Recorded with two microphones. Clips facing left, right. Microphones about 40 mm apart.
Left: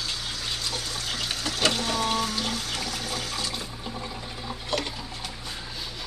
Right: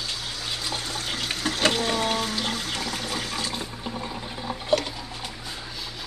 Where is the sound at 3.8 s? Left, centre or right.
Centre.